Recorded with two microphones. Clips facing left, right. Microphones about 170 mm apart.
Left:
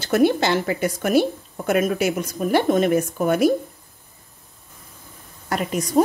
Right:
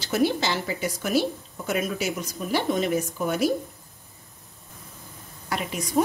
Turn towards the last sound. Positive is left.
turn(degrees=45)  # may be behind; listen again after turning